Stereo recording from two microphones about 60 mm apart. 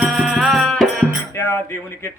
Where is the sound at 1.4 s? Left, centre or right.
Left.